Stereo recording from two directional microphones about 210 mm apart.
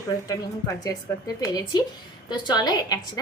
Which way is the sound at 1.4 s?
20° left (ahead or behind).